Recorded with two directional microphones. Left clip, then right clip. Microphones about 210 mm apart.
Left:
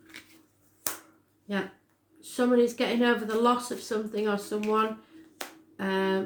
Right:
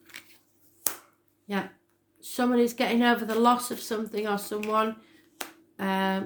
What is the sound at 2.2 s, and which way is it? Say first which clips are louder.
Speech: left 1 dB; 50° right (ahead or behind).